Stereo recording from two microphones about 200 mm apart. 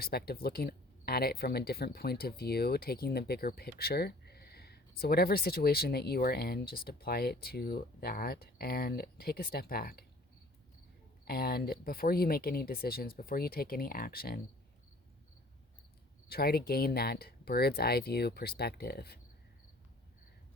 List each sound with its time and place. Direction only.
0.0 s speech: 50° left (ahead or behind)
11.3 s speech: 50° left (ahead or behind)
16.3 s speech: 50° left (ahead or behind)